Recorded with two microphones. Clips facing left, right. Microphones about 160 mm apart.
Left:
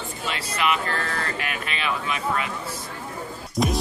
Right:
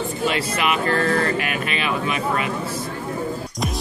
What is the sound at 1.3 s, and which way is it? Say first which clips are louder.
Speech: right 6 dB; 65° right (ahead or behind).